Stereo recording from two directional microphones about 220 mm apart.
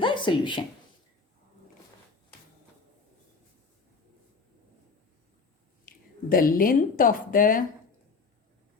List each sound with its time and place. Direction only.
0.0 s speech: 20° left (ahead or behind)
6.2 s speech: 40° left (ahead or behind)